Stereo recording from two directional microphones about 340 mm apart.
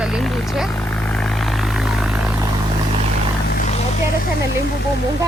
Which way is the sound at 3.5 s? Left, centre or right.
Left.